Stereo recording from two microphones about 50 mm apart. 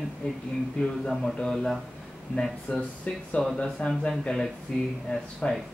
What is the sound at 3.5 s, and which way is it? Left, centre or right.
Speech, centre.